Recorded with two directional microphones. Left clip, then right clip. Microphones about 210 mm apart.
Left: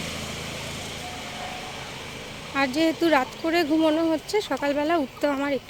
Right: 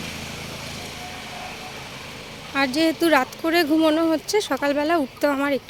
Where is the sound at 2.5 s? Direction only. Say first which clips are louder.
Right 2 dB; 20° right (ahead or behind).